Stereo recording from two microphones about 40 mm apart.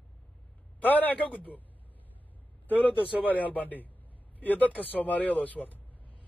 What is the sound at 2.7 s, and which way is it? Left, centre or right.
A man's voice, left.